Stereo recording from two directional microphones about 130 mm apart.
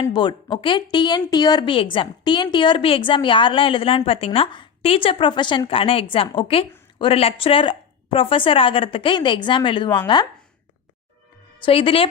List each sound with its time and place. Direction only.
0.0 s a woman's voice: 40° left (ahead or behind)
11.6 s a woman's voice: 40° left (ahead or behind)